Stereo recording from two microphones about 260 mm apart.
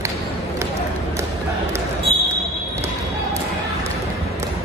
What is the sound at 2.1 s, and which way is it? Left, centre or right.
Basketball bounce, right.